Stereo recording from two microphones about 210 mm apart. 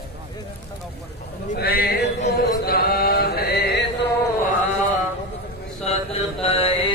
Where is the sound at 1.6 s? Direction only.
50° left (ahead or behind).